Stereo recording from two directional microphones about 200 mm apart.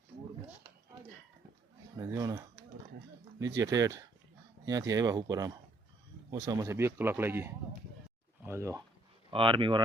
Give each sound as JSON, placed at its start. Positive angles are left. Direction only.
{"t": 2.0, "sound": "speech", "side_deg": -15}
{"t": 3.4, "sound": "speech", "side_deg": -15}
{"t": 9.3, "sound": "speech", "side_deg": -25}